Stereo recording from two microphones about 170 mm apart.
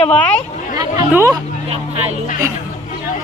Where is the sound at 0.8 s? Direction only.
20° right (ahead or behind).